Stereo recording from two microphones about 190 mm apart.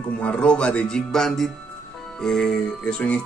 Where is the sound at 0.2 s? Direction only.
5° left (ahead or behind).